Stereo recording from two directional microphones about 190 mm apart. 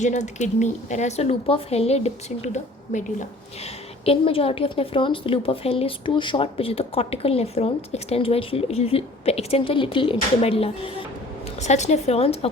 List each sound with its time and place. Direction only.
0.0 s a woman's voice: 40° left (ahead or behind)